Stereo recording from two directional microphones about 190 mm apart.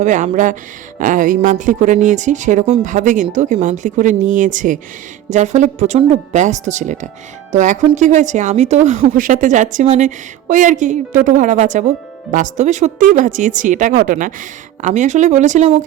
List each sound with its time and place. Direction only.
0.0 s speech: 40° right (ahead or behind)